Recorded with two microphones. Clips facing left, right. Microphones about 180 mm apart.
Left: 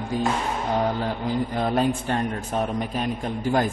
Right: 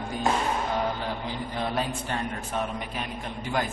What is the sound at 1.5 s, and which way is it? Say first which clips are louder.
A man's voice: left 5 dB; 45° left (ahead or behind).